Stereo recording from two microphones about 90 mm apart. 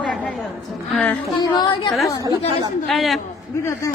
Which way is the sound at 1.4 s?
50° left (ahead or behind).